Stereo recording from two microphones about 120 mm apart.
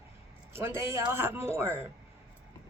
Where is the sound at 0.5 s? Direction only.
20° right (ahead or behind).